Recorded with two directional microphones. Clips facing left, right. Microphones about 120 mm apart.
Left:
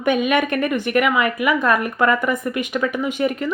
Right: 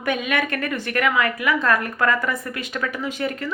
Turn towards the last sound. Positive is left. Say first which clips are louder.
# left 5 dB
turn(degrees=15)  # may be behind; listen again after turning